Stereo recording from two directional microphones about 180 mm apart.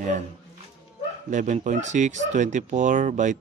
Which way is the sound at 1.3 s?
40° right (ahead or behind).